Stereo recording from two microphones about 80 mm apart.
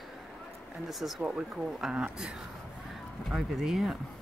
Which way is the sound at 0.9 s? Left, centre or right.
Centre.